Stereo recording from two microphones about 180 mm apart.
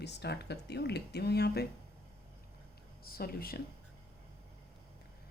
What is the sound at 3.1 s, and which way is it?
Speech, 55° left (ahead or behind).